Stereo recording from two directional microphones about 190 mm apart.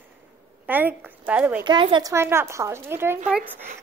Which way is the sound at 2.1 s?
15° right (ahead or behind).